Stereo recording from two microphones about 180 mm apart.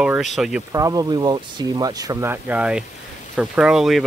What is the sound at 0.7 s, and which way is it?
Speech, 20° right (ahead or behind).